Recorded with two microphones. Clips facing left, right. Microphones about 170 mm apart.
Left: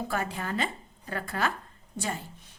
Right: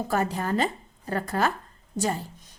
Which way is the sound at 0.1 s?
40° right (ahead or behind).